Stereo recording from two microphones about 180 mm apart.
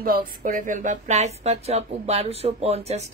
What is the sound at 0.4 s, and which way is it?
Speech, 50° right (ahead or behind).